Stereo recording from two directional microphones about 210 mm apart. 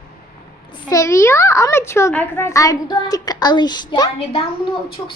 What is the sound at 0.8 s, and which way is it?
A child's voice, 15° left (ahead or behind).